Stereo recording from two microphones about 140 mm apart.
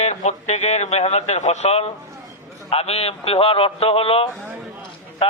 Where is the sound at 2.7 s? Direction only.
45° left (ahead or behind).